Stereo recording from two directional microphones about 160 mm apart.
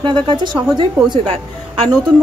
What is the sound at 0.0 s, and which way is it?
Speech, 30° right (ahead or behind).